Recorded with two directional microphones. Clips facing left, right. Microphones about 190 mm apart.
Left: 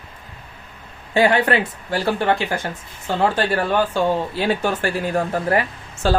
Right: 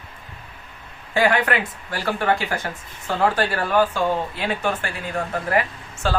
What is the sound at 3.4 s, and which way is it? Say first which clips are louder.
Speech: left 1 dB; 25° left (ahead or behind).